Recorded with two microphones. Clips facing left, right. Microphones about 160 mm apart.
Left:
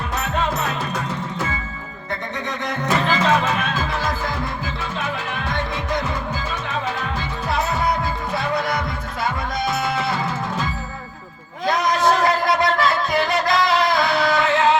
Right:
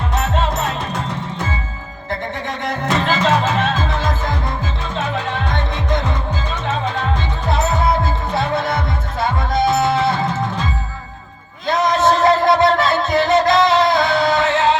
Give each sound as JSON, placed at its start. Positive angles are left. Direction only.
{"t": 3.1, "sound": "music", "side_deg": -30}
{"t": 7.5, "sound": "music", "side_deg": -25}
{"t": 11.6, "sound": "music", "side_deg": -25}